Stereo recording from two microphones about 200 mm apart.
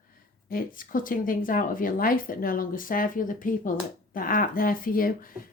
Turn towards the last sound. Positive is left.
turn(degrees=45)  # may be behind; listen again after turning